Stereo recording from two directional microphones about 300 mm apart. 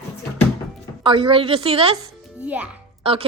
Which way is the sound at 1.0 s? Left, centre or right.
Centre.